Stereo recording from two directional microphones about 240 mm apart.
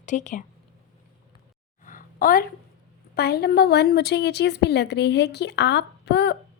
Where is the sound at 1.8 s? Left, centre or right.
Left.